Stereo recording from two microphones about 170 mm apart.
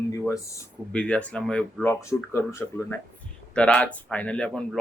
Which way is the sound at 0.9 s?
5° left (ahead or behind).